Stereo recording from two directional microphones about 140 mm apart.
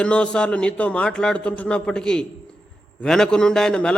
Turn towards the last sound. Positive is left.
turn(degrees=5)  # may be behind; listen again after turning